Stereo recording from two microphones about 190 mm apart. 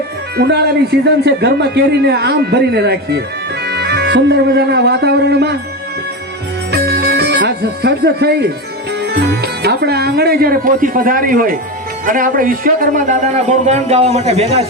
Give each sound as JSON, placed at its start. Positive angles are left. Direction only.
{"t": 0.3, "sound": "a man's voice", "side_deg": -60}
{"t": 6.7, "sound": "music", "side_deg": -60}
{"t": 9.0, "sound": "a man's voice", "side_deg": -60}